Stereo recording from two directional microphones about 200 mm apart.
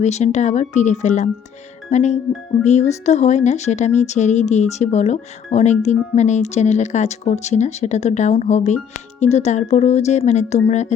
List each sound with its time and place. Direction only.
0.0 s speech: 35° left (ahead or behind)